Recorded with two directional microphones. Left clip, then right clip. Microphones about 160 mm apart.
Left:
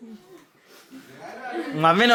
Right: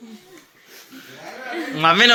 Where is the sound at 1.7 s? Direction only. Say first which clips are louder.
Right 4 dB; 35° left (ahead or behind).